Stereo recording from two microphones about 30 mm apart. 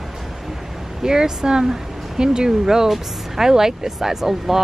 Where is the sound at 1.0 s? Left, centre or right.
Right.